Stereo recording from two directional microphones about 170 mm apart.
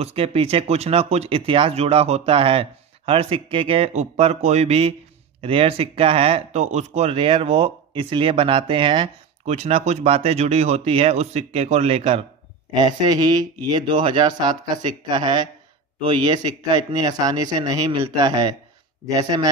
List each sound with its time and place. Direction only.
0.0 s a man's voice: 35° right (ahead or behind); by 19.5 s 20° right (ahead or behind)